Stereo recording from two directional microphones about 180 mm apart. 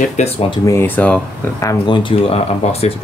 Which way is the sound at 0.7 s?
10° left (ahead or behind).